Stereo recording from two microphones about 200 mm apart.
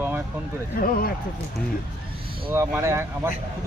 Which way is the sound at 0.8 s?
50° left (ahead or behind).